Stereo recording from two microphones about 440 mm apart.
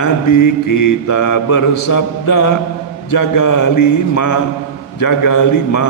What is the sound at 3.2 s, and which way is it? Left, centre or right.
Speech, left.